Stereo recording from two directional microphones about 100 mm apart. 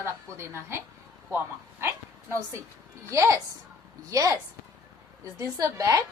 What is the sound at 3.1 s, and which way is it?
A woman's voice, 30° right (ahead or behind).